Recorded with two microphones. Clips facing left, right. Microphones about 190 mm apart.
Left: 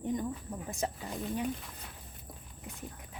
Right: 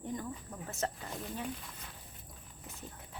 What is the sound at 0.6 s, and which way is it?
Speech, 15° left (ahead or behind).